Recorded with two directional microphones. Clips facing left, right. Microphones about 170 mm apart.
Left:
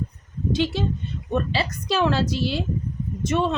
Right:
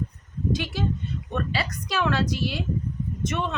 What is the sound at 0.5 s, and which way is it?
A woman's voice, 25° left (ahead or behind).